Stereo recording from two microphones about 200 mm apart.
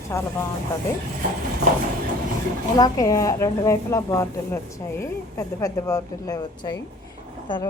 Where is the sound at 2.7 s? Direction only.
20° left (ahead or behind).